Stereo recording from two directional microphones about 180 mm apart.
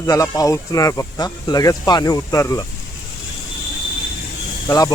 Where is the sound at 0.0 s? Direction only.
20° left (ahead or behind).